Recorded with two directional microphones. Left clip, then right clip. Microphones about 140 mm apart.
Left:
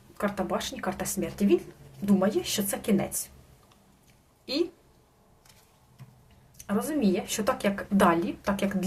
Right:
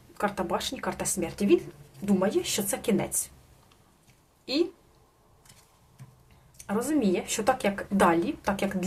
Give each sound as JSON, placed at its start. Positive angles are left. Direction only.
{"t": 0.2, "sound": "a woman's voice", "side_deg": -15}
{"t": 6.6, "sound": "a woman's voice", "side_deg": -20}